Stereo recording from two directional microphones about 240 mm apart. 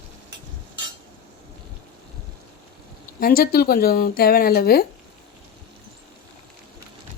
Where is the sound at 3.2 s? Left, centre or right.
Left.